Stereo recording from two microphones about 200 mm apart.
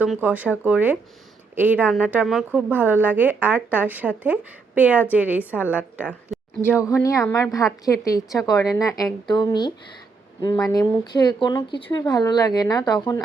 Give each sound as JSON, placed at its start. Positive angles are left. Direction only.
{"t": 0.0, "sound": "a woman's voice", "side_deg": -5}
{"t": 6.6, "sound": "a woman's voice", "side_deg": 15}